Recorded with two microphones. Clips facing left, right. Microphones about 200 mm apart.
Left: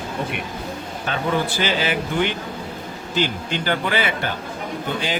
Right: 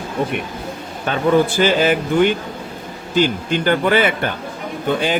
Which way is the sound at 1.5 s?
50° right (ahead or behind).